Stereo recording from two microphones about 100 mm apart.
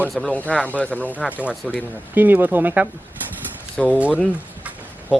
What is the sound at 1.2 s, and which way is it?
Speech, 15° right (ahead or behind).